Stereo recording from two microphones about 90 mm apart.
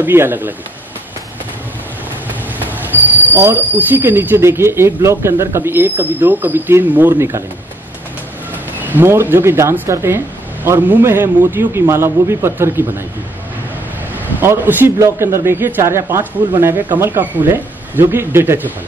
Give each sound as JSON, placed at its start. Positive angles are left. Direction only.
{"t": 0.0, "sound": "speech", "side_deg": -25}
{"t": 2.7, "sound": "speech", "side_deg": -20}
{"t": 8.7, "sound": "speech", "side_deg": -20}
{"t": 14.1, "sound": "speech", "side_deg": -25}